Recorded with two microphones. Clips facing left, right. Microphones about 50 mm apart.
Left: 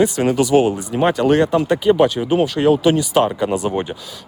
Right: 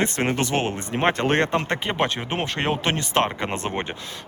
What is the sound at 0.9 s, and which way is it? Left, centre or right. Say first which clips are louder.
Speech: left 5 dB; right.